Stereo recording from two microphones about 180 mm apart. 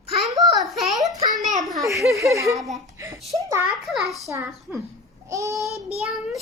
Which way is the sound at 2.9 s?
20° right (ahead or behind).